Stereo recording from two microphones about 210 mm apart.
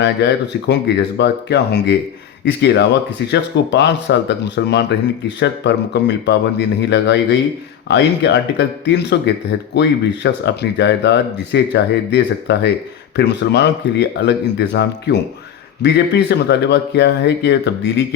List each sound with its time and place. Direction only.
0.0 s speech: 55° left (ahead or behind)